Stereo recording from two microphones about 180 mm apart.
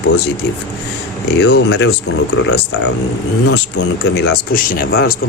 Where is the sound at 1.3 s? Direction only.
70° left (ahead or behind).